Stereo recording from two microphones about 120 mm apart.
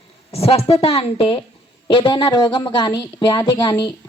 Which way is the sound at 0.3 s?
55° left (ahead or behind).